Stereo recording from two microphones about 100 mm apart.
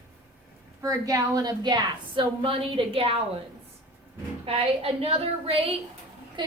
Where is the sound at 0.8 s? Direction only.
35° right (ahead or behind); by 3.2 s 70° right (ahead or behind).